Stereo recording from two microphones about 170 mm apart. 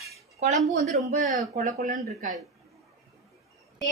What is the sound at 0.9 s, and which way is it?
Speech, 45° right (ahead or behind).